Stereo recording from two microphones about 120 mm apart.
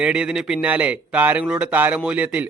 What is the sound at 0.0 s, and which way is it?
Speech, 10° right (ahead or behind).